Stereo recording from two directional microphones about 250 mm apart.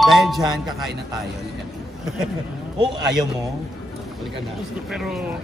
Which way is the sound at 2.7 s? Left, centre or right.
Centre.